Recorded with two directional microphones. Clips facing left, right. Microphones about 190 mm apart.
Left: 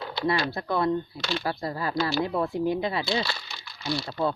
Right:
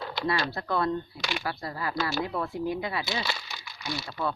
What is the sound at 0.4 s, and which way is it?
Speech, 15° left (ahead or behind).